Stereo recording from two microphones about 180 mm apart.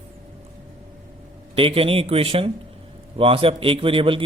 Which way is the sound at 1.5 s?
30° right (ahead or behind).